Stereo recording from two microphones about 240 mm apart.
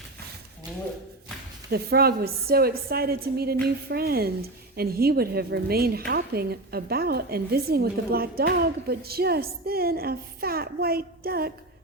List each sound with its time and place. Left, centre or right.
1.7 s a woman's voice: right